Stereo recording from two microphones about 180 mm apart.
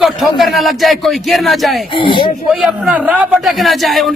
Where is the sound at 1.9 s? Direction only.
25° left (ahead or behind).